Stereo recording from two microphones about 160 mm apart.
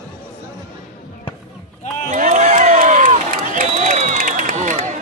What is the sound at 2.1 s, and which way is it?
Crowd, 50° right (ahead or behind).